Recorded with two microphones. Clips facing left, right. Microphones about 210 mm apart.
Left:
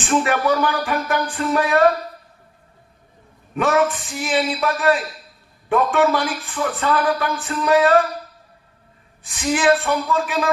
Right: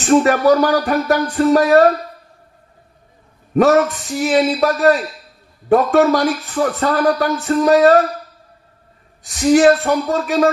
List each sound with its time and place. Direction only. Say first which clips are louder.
0.0 s speech: right 7 dB; 40° right (ahead or behind)
3.5 s speech: right 6 dB; 40° right (ahead or behind)
9.2 s speech: right 8 dB; 40° right (ahead or behind)